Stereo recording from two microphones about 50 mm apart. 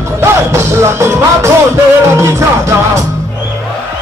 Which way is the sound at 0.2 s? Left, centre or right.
Right.